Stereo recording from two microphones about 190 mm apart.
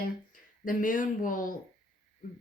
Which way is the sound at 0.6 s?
45° left (ahead or behind).